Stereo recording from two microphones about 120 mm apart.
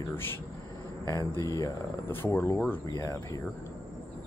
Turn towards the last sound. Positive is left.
turn(degrees=25)  # may be behind; listen again after turning